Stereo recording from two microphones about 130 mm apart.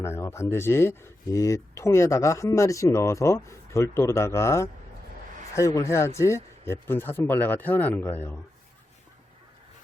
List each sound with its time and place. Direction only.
0.0 s speech: 20° left (ahead or behind)